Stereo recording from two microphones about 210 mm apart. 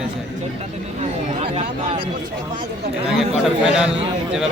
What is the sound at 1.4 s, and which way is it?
Speech, 30° right (ahead or behind).